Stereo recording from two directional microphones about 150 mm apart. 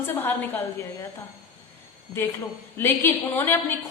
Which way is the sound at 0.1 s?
15° left (ahead or behind).